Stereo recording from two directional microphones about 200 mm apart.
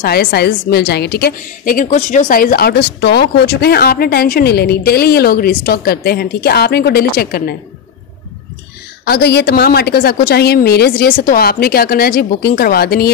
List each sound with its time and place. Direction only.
0.0 s a woman's voice: 50° left (ahead or behind)
9.0 s a woman's voice: 55° left (ahead or behind)